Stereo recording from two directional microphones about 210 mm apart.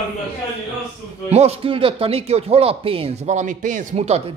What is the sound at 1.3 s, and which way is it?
Speech, 30° right (ahead or behind).